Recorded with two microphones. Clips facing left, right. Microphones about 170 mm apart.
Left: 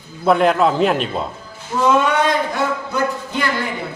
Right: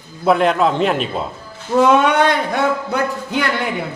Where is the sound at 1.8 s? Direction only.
65° right (ahead or behind).